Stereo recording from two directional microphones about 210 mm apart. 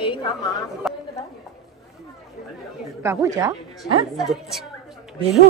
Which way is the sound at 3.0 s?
15° right (ahead or behind).